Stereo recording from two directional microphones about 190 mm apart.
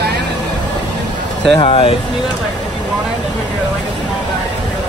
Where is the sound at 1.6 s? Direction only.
30° left (ahead or behind).